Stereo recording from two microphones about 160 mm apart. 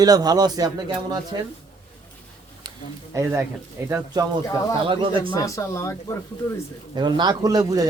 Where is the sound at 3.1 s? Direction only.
15° right (ahead or behind).